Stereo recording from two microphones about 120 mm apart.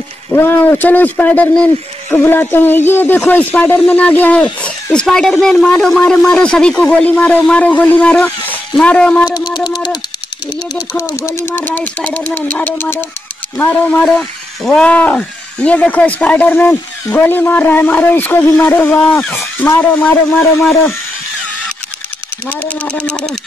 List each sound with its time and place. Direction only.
0.3 s speech: 15° left (ahead or behind)
9.2 s a sound: 5° right (ahead or behind)
11.0 s speech: 25° left (ahead or behind)
22.5 s speech: 10° left (ahead or behind)